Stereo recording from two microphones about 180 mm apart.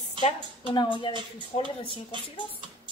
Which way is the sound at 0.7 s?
25° left (ahead or behind).